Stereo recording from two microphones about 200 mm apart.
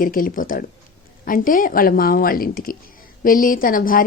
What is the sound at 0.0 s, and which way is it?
A woman's voice, 45° left (ahead or behind).